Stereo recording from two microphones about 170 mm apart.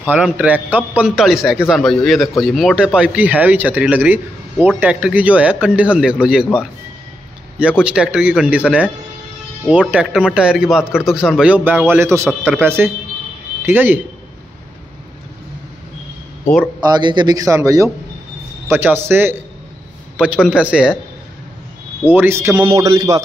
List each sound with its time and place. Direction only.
0.0 s a man's voice: 10° right (ahead or behind)
16.8 s a man's voice: 25° right (ahead or behind)
20.4 s a man's voice: 5° right (ahead or behind)
22.0 s a man's voice: 10° right (ahead or behind)